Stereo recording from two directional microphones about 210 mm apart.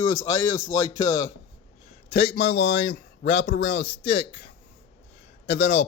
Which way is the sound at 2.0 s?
50° left (ahead or behind).